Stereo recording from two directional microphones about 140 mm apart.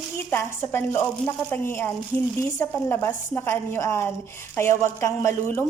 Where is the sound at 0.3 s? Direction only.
15° left (ahead or behind).